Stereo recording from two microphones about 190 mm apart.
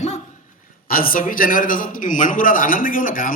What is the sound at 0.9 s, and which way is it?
Mantra, 50° left (ahead or behind).